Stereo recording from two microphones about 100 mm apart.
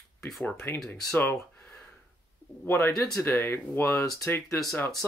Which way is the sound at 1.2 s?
20° left (ahead or behind).